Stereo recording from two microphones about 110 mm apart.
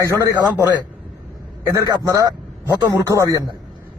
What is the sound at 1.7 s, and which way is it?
A man's voice, 30° right (ahead or behind).